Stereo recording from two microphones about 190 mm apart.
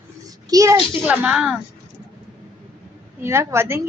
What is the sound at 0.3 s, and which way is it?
A woman's voice, 20° right (ahead or behind).